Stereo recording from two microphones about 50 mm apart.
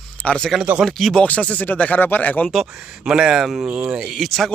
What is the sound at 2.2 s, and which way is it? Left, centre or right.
Speech, left.